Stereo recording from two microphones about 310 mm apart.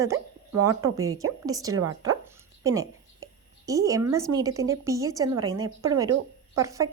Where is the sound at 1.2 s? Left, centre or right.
Centre.